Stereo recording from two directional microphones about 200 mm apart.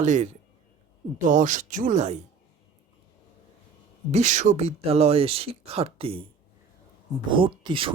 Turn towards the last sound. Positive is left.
turn(degrees=-25)  # may be behind; listen again after turning